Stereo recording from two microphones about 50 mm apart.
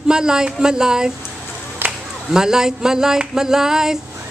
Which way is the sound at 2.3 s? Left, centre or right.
Centre.